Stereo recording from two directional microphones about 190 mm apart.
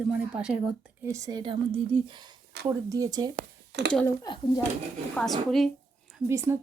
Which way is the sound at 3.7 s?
60° right (ahead or behind).